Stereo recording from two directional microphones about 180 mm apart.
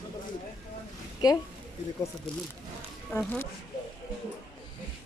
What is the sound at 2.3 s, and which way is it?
A woman's voice, 5° left (ahead or behind).